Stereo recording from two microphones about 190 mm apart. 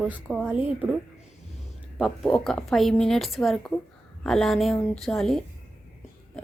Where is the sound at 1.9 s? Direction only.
Centre (ahead or behind).